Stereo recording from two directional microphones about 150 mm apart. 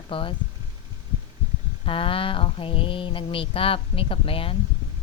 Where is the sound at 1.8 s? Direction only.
35° left (ahead or behind).